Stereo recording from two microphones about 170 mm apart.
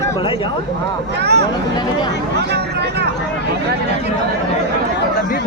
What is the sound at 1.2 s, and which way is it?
Speech, 75° right (ahead or behind).